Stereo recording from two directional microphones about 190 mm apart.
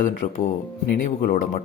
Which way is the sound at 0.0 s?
40° left (ahead or behind).